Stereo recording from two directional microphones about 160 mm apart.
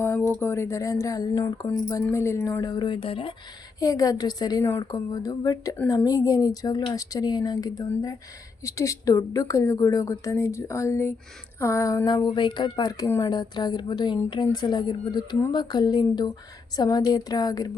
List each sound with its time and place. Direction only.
0.0 s speech: 15° left (ahead or behind); by 3.3 s 35° left (ahead or behind)
3.8 s speech: 20° left (ahead or behind)